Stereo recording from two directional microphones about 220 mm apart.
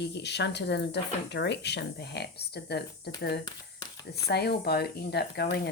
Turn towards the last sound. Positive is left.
turn(degrees=45)  # may be behind; listen again after turning